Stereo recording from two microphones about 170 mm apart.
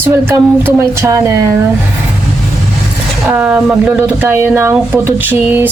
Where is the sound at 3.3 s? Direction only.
5° right (ahead or behind).